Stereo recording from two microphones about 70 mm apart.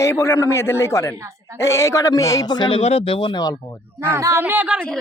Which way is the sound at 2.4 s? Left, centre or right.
Left.